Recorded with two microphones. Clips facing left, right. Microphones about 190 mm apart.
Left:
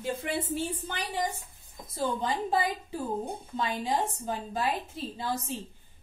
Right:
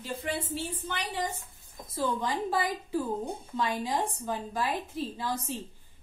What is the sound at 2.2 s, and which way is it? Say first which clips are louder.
A woman's voice: left 1 dB; 25° left (ahead or behind).